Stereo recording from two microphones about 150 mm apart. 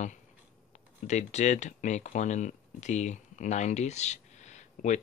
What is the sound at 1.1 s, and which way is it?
Speech, 50° left (ahead or behind).